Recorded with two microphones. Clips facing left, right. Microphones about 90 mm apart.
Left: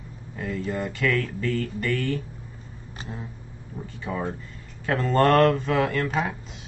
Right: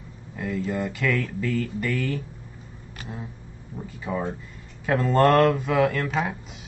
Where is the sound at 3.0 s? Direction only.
30° left (ahead or behind).